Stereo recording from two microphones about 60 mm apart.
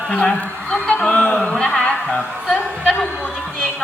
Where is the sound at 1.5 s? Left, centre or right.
Centre.